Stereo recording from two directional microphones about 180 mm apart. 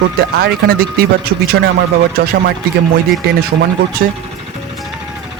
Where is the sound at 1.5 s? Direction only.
65° right (ahead or behind).